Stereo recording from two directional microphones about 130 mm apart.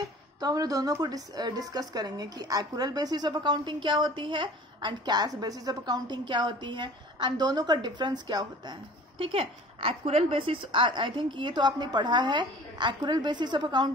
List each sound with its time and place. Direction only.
0.4 s a woman's voice: 30° right (ahead or behind)
9.2 s a woman's voice: 45° right (ahead or behind)